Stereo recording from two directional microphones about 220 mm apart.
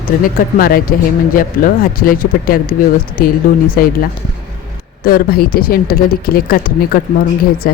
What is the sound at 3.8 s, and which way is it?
Speech, 40° left (ahead or behind).